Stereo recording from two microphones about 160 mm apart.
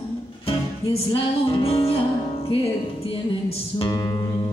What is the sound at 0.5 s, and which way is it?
Music, 35° left (ahead or behind).